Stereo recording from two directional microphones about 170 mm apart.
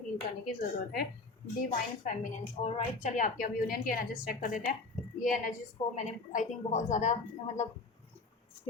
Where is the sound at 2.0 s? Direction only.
45° left (ahead or behind).